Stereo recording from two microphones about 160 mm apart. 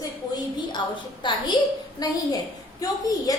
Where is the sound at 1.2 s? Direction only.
30° left (ahead or behind).